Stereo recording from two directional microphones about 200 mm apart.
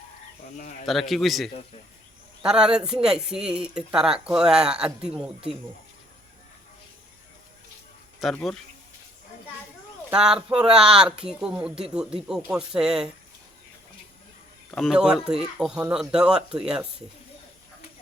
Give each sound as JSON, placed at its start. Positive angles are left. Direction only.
{"t": 0.5, "sound": "speech", "side_deg": 40}
{"t": 0.9, "sound": "speech", "side_deg": 0}
{"t": 8.2, "sound": "speech", "side_deg": 0}
{"t": 10.1, "sound": "speech", "side_deg": -5}
{"t": 14.8, "sound": "speech", "side_deg": -5}